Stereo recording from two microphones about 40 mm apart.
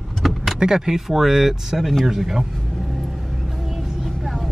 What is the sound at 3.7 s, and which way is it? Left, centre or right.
Vehicle, centre.